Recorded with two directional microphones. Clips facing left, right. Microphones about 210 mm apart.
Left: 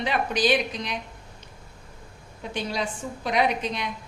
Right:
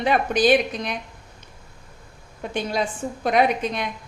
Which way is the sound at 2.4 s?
50° right (ahead or behind).